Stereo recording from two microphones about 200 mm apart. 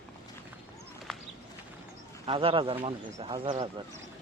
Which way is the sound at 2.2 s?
25° right (ahead or behind).